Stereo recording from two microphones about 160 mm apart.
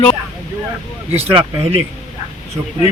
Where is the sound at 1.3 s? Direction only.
30° right (ahead or behind).